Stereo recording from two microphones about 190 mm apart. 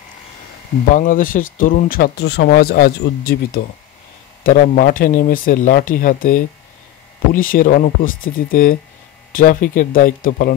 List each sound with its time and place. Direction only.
0.9 s speech: 45° left (ahead or behind)